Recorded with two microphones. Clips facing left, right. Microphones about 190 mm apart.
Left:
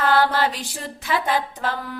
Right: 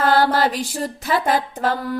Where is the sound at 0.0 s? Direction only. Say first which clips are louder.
Right 2 dB; 40° right (ahead or behind).